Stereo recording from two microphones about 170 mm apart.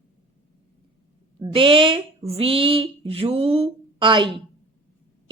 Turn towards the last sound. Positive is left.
turn(degrees=-30)  # may be behind; listen again after turning